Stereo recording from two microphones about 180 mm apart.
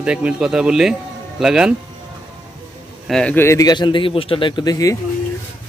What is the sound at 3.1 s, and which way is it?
A man's voice, 5° left (ahead or behind).